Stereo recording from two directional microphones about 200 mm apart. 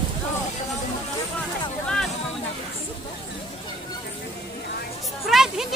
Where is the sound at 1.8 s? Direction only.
5° left (ahead or behind).